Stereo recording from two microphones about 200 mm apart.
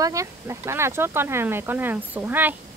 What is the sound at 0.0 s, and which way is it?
Speech, 15° right (ahead or behind).